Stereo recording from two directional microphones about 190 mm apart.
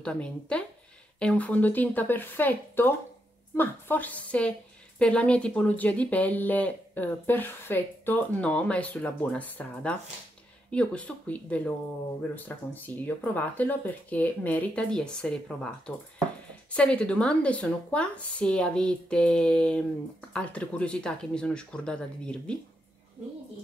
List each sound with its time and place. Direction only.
0.0 s a woman's voice: 5° left (ahead or behind)